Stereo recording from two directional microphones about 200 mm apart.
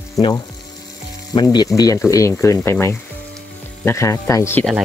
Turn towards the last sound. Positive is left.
turn(degrees=15)  # may be behind; listen again after turning